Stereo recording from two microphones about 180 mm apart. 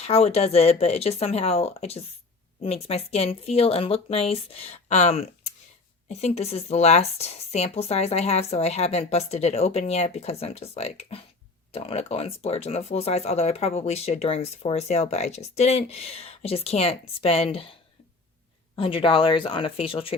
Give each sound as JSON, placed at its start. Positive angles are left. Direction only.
{"t": 0.0, "sound": "speech", "side_deg": 35}
{"t": 18.8, "sound": "speech", "side_deg": 30}